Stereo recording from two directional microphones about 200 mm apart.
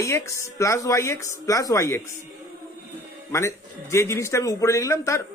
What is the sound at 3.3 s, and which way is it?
A man's voice, 15° left (ahead or behind).